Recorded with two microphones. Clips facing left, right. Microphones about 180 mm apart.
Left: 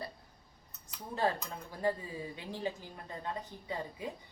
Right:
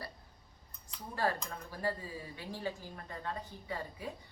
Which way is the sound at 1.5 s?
20° left (ahead or behind).